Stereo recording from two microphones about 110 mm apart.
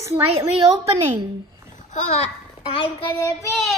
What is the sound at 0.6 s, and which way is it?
Speech, 65° right (ahead or behind).